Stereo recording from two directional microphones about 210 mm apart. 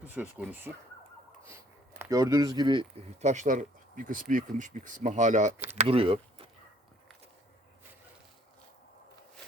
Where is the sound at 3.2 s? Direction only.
35° right (ahead or behind).